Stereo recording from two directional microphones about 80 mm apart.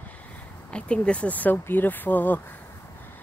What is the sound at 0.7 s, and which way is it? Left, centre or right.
Speech, centre.